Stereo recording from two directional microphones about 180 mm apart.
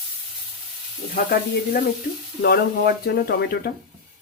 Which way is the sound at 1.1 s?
55° left (ahead or behind).